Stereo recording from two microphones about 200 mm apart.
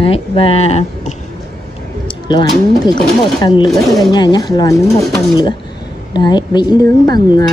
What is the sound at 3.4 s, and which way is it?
Speech, 20° left (ahead or behind).